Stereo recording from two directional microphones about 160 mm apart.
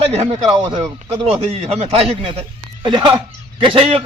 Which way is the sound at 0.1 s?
45° right (ahead or behind).